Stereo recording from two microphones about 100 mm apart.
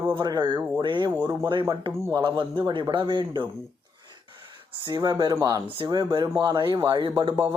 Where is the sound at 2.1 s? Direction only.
55° right (ahead or behind).